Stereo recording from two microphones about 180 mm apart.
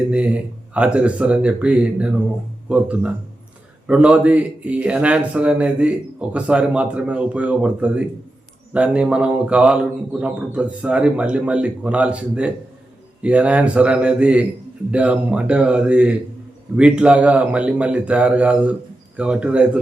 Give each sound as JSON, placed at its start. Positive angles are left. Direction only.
{"t": 0.1, "sound": "a man's voice", "side_deg": -5}